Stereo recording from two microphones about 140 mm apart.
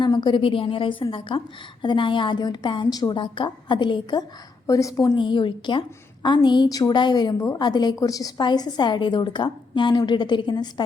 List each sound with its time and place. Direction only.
0.0 s a woman's voice: 30° left (ahead or behind)
4.6 s a woman's voice: 25° left (ahead or behind)
5.1 s a woman's voice: 35° left (ahead or behind)